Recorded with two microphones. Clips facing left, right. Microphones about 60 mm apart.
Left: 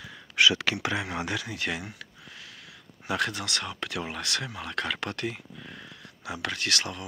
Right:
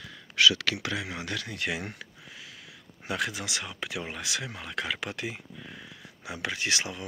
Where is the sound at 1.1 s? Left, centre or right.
Left.